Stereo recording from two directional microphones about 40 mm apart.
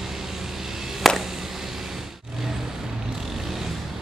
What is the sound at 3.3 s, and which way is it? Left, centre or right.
Vehicle, centre.